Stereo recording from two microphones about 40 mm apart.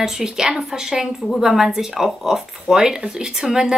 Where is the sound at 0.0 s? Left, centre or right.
Centre.